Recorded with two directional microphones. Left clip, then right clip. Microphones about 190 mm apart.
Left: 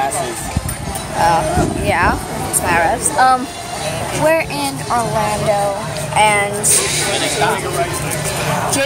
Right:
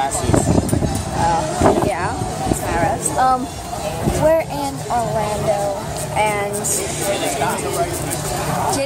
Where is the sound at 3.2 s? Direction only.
10° right (ahead or behind).